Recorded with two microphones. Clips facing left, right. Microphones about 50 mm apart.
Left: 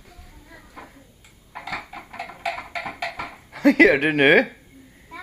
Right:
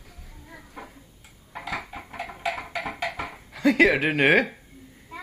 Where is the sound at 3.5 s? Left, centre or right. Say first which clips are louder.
Left 4 dB; left.